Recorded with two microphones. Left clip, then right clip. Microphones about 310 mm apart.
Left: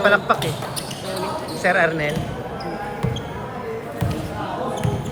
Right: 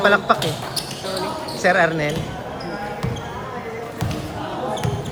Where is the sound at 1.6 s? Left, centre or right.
Centre.